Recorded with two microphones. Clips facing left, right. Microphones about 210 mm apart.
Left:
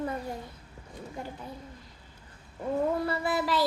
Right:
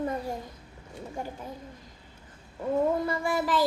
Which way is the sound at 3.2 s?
45° right (ahead or behind).